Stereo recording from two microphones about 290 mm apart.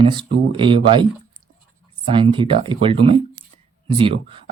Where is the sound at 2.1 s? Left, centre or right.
Centre.